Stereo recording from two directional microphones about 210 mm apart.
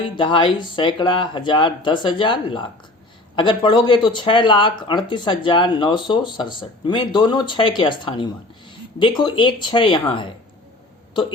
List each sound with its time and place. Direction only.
0.2 s speech: 20° left (ahead or behind)